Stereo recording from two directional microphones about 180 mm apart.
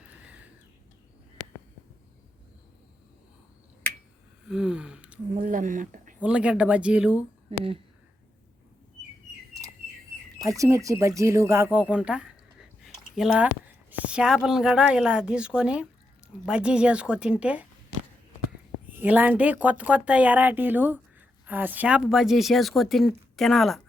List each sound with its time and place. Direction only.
4.4 s gasp: 5° right (ahead or behind)
5.3 s speech: 45° right (ahead or behind)
6.1 s speech: 5° right (ahead or behind)
10.6 s speech: 15° right (ahead or behind)
18.9 s speech: 10° right (ahead or behind)